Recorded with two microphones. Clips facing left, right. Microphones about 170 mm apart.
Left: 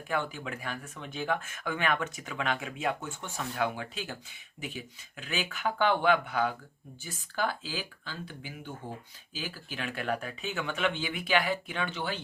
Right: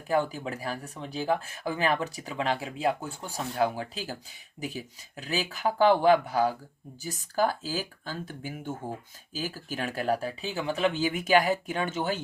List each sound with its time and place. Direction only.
0.1 s speech: 35° right (ahead or behind)